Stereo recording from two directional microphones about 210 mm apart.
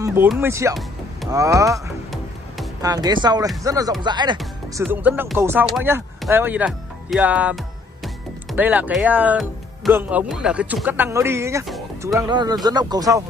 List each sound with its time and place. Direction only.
0.0 s speech: 10° right (ahead or behind)
4.7 s speech: 10° right (ahead or behind)
8.5 s speech: 5° right (ahead or behind)